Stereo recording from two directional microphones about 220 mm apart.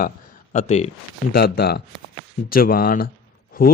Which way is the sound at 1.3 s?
45° left (ahead or behind).